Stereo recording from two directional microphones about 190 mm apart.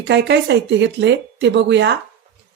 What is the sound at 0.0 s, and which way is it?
Speech, 65° right (ahead or behind).